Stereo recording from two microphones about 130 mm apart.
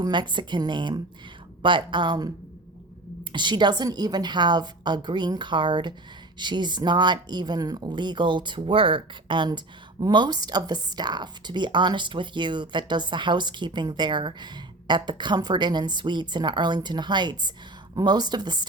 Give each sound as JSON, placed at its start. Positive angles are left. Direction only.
{"t": 0.0, "sound": "speech", "side_deg": -35}
{"t": 3.3, "sound": "speech", "side_deg": -35}